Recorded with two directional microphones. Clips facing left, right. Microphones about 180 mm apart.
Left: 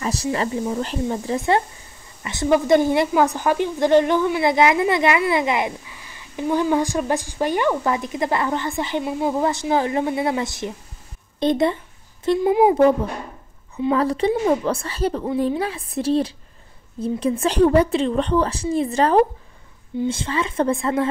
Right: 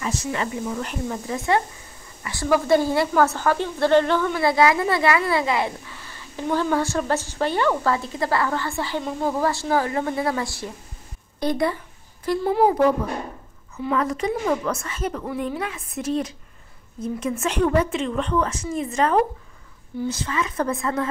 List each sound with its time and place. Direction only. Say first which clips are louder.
0.0 s a woman's voice: left 3 dB; 35° left (ahead or behind)
13.9 s a woman's voice: left 3 dB; 30° left (ahead or behind)